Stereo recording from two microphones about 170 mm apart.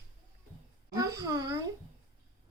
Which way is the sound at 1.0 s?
20° right (ahead or behind).